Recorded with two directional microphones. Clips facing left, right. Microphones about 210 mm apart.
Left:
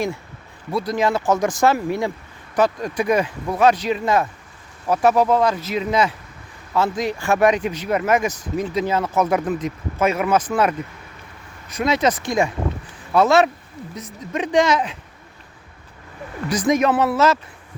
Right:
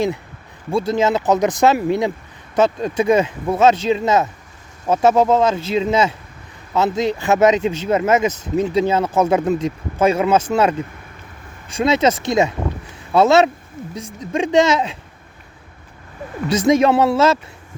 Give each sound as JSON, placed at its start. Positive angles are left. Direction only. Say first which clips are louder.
{"t": 0.7, "sound": "speech", "louder": "right 3 dB", "side_deg": -25}
{"t": 16.5, "sound": "speech", "louder": "right 4 dB", "side_deg": -25}